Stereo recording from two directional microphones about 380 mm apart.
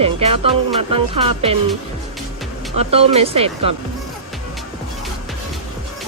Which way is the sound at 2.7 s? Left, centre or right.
Centre.